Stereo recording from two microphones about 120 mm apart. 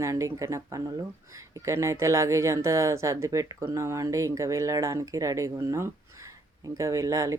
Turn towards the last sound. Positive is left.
turn(degrees=-25)  # may be behind; listen again after turning